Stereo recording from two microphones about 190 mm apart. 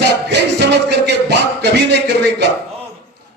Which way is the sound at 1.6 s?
65° right (ahead or behind).